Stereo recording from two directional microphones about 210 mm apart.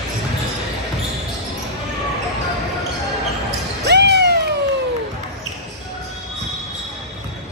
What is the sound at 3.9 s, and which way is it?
Cat, 55° right (ahead or behind).